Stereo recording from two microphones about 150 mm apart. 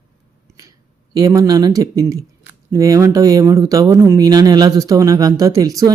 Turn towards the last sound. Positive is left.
turn(degrees=-25)  # may be behind; listen again after turning